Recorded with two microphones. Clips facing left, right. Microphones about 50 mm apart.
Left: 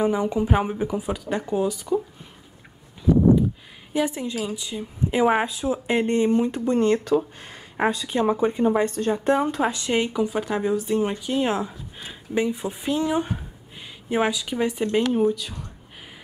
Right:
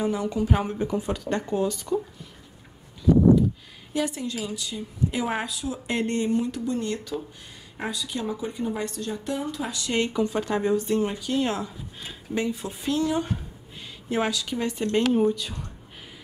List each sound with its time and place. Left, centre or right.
0.0 s speech: left
3.0 s speech: left
5.9 s a woman's voice: centre
9.9 s speech: centre
11.0 s speech: centre